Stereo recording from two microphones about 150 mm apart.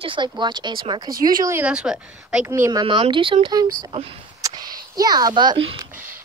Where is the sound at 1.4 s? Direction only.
10° right (ahead or behind).